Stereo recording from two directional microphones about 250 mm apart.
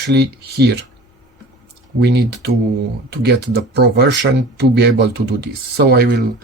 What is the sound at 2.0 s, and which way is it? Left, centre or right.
Speech, right.